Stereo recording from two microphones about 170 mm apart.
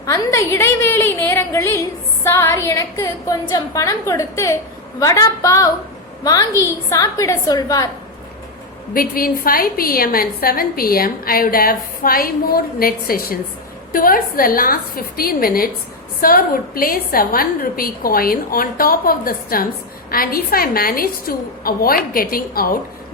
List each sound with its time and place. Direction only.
0.0 s a woman's voice: 20° left (ahead or behind)
8.9 s a woman's voice: 60° left (ahead or behind)